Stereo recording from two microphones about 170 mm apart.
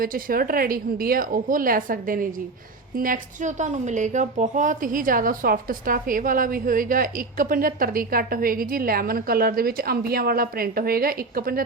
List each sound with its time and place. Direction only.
0.0 s a woman's voice: 55° right (ahead or behind)